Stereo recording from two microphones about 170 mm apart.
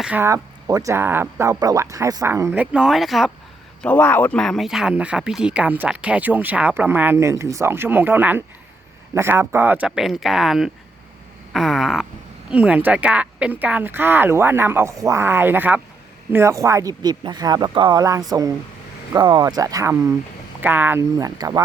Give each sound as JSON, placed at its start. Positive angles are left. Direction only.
{"t": 0.0, "sound": "speech", "side_deg": -10}